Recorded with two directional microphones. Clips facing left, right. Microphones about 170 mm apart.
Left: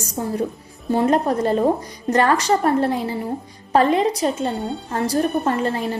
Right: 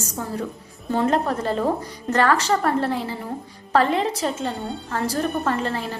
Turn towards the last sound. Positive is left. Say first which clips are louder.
# left 3 dB
turn(degrees=15)  # may be behind; listen again after turning